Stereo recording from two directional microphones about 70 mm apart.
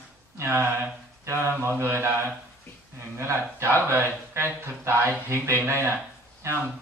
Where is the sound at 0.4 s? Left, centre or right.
Right.